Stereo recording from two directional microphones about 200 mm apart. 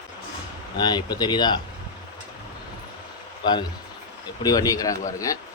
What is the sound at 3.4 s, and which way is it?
Speech, 20° left (ahead or behind).